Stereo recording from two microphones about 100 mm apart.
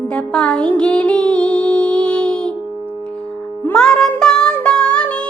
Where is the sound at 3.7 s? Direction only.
5° left (ahead or behind).